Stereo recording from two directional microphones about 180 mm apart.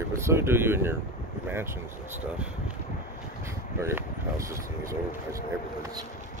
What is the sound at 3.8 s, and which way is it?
Speech, 15° right (ahead or behind).